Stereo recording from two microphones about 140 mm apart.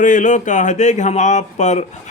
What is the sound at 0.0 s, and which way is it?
Speech, 65° left (ahead or behind).